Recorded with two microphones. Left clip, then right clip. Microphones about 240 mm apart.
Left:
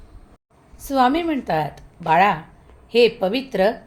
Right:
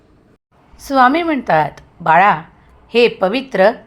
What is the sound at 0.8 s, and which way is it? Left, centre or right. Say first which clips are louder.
A woman's voice: right 6 dB; centre.